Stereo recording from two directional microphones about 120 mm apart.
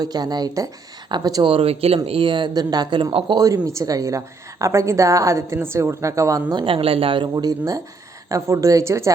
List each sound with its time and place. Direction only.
0.0 s speech: 35° right (ahead or behind)
1.5 s speech: 50° right (ahead or behind)
3.3 s a woman's voice: 30° right (ahead or behind)